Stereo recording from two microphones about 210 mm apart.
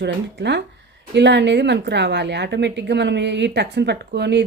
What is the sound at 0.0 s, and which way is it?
A woman's voice, 55° right (ahead or behind).